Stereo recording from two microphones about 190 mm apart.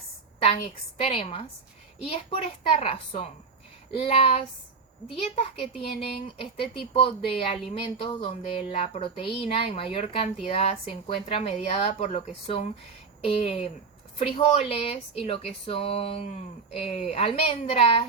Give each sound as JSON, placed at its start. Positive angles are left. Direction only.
{"t": 1.0, "sound": "a woman's voice", "side_deg": 30}
{"t": 2.7, "sound": "a woman's voice", "side_deg": 30}